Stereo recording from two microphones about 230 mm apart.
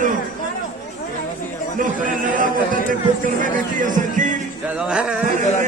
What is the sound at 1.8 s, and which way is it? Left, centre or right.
A man's voice, right.